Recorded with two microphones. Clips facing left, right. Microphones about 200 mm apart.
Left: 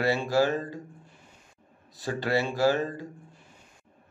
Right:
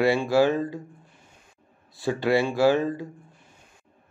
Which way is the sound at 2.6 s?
15° right (ahead or behind).